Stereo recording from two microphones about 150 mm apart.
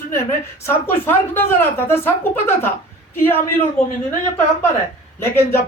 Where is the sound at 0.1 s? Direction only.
15° left (ahead or behind).